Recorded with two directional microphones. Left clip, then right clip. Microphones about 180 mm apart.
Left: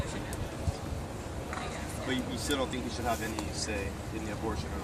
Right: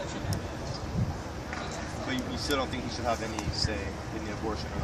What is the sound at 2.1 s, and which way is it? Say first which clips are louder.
Speech: right 1 dB; 25° right (ahead or behind).